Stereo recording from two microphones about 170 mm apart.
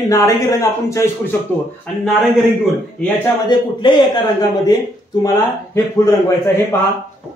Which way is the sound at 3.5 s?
25° left (ahead or behind).